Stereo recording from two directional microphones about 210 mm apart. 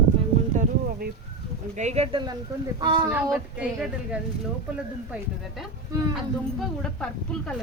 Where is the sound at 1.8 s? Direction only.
30° right (ahead or behind).